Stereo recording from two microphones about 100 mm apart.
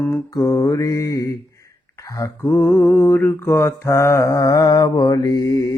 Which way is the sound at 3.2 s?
25° left (ahead or behind).